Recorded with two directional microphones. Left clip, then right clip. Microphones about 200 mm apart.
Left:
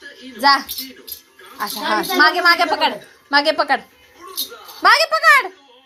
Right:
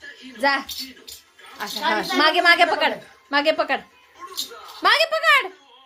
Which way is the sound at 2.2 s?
15° right (ahead or behind).